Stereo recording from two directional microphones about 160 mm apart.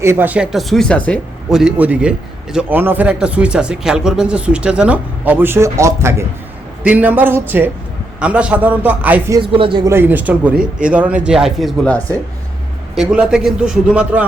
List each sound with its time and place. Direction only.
0.0 s a man's voice: 15° right (ahead or behind); by 1.2 s 10° left (ahead or behind)
1.5 s a man's voice: 5° right (ahead or behind)
9.4 s speech: 30° right (ahead or behind)
9.9 s a man's voice: 15° right (ahead or behind)
11.9 s speech: 10° left (ahead or behind)
13.0 s a man's voice: 5° right (ahead or behind)